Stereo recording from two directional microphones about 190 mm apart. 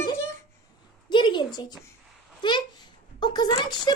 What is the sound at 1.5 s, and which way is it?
Speech, 20° left (ahead or behind).